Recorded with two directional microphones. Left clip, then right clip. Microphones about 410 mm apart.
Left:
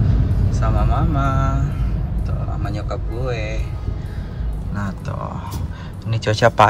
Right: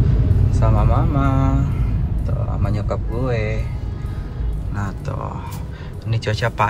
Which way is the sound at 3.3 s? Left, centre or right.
Centre.